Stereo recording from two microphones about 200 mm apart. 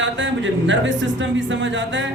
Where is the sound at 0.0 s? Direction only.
65° right (ahead or behind).